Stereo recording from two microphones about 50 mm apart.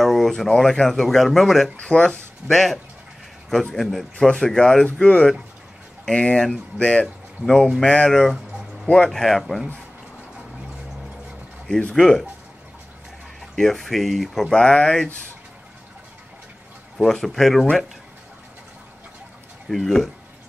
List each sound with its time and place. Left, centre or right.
0.0 s speech: centre
1.9 s speech: centre
5.0 s speech: left
7.4 s speech: centre
7.8 s speech: left
8.1 s speech: centre
9.5 s speech: centre
11.9 s speech: centre
13.6 s speech: centre
14.5 s speech: centre
17.0 s speech: centre
19.7 s speech: centre